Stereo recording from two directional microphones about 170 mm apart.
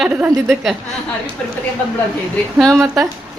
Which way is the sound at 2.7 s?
20° right (ahead or behind).